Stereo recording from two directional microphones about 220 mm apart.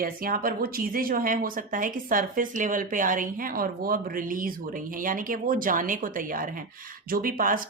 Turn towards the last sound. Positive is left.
turn(degrees=-40)  # may be behind; listen again after turning